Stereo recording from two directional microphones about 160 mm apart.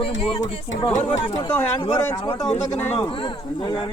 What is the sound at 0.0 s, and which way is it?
Speech, 35° left (ahead or behind).